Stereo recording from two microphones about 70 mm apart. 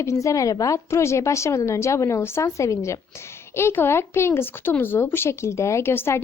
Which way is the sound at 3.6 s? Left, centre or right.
Left.